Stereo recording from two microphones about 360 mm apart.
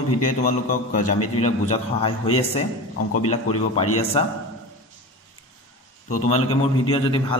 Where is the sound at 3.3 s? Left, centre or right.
Centre.